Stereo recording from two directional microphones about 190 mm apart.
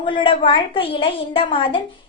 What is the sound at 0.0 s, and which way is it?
A woman's voice, 25° left (ahead or behind).